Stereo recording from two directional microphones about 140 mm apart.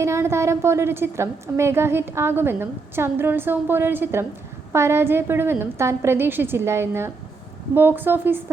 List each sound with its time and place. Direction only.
0.0 s a woman's voice: 20° right (ahead or behind)